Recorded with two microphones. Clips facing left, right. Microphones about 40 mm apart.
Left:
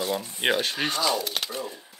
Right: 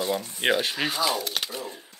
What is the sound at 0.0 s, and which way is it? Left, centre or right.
Speech, centre.